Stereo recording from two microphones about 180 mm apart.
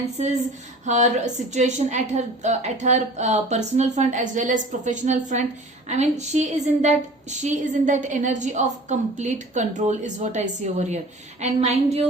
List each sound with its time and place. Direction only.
0.2 s a woman's voice: 40° right (ahead or behind)